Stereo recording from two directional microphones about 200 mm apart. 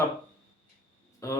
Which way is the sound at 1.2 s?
15° left (ahead or behind).